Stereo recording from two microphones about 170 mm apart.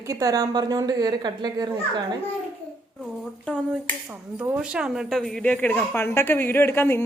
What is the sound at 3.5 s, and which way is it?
Speech, 10° left (ahead or behind).